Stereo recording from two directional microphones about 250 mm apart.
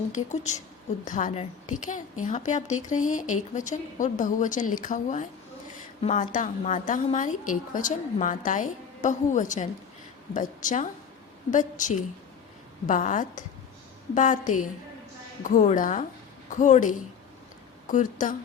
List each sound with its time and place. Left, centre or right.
0.1 s a woman's voice: left